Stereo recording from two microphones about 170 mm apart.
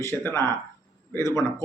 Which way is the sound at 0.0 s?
15° left (ahead or behind).